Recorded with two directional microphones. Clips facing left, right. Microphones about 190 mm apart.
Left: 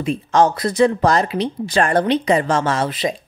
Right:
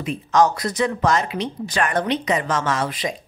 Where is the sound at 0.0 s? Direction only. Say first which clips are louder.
Left 2 dB; 30° left (ahead or behind).